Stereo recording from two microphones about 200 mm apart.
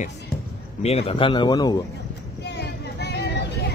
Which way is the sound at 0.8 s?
30° left (ahead or behind).